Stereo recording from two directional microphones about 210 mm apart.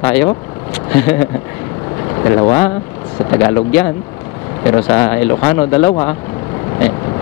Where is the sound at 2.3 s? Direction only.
20° left (ahead or behind).